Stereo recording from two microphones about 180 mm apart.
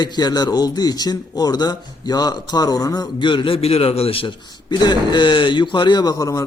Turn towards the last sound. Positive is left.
turn(degrees=20)  # may be behind; listen again after turning